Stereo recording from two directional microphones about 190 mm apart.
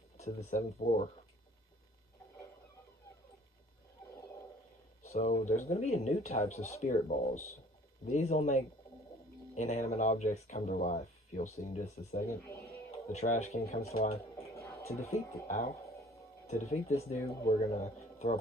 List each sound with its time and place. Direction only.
0.3 s speech: 40° left (ahead or behind)
5.1 s speech: 40° left (ahead or behind)
13.9 s speech: 50° left (ahead or behind)
14.3 s music: 15° left (ahead or behind)
15.4 s speech: 45° left (ahead or behind)
16.7 s speech: 35° left (ahead or behind)